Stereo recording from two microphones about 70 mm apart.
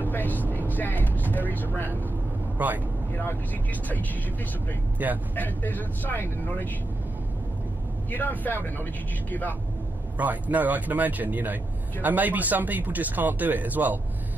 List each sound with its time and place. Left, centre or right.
0.0 s vehicle: left
0.7 s speech: left
2.6 s speech: right
4.9 s speech: right
5.3 s speech: left
8.1 s speech: left
10.1 s speech: right